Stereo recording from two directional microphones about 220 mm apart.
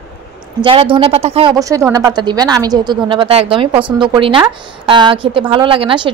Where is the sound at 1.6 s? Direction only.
15° right (ahead or behind).